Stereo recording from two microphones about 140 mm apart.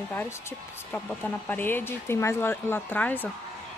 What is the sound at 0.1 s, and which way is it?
A woman's voice, 15° left (ahead or behind).